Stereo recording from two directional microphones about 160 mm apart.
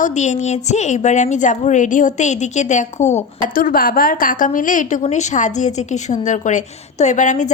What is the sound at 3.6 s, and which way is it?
A woman's voice, 65° left (ahead or behind).